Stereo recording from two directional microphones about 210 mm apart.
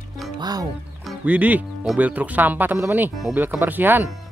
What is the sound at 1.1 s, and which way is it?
Speech, 5° right (ahead or behind).